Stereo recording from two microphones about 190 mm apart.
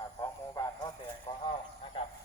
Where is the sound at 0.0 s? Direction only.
20° left (ahead or behind).